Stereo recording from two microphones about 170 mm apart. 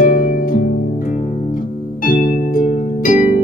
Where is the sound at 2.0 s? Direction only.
55° left (ahead or behind).